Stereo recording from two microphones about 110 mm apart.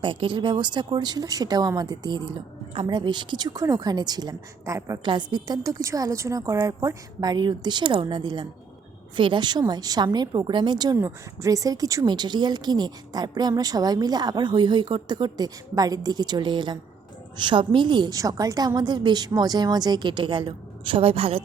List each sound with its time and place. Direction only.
0.0 s speech: 50° right (ahead or behind); by 4.9 s 30° right (ahead or behind)
5.0 s a woman's voice: 40° right (ahead or behind)
10.9 s a woman's voice: 25° right (ahead or behind); by 18.1 s 45° right (ahead or behind)
18.1 s a woman's voice: 35° right (ahead or behind); by 21.4 s 60° right (ahead or behind)